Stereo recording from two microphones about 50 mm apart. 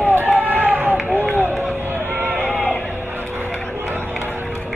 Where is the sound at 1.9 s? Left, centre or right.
Right.